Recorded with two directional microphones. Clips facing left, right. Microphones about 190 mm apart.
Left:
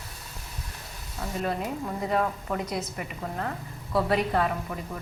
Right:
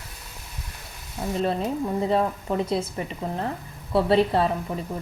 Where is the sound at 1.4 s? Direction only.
25° right (ahead or behind).